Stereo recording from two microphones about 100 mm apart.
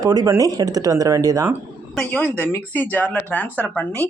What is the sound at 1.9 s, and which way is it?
Speech, 10° left (ahead or behind).